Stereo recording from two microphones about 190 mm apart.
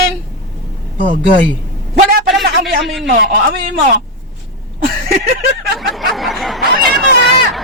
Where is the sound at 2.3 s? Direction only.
Centre (ahead or behind).